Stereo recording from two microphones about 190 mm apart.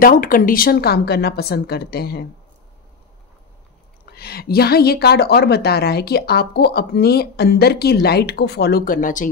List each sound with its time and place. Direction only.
0.0 s a woman's voice: 45° left (ahead or behind)
4.0 s a woman's voice: 55° left (ahead or behind)